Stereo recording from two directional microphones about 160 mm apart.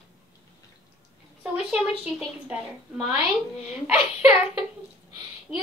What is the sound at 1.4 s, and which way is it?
A woman's voice, 5° right (ahead or behind).